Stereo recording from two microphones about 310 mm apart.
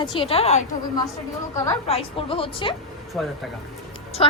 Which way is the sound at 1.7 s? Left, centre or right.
Centre.